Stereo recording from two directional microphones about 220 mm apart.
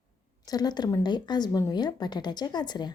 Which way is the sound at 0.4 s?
15° left (ahead or behind).